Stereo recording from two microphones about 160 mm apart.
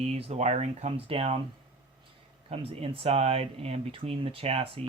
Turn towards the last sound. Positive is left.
turn(degrees=-40)  # may be behind; listen again after turning